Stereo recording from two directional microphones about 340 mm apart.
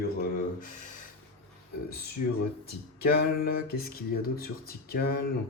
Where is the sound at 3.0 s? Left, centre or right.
Left.